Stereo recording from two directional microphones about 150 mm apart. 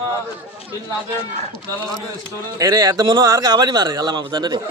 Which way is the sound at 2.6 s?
25° right (ahead or behind).